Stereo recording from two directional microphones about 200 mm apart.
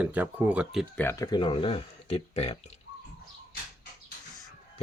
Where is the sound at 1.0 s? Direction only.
15° left (ahead or behind); by 2.7 s 30° left (ahead or behind).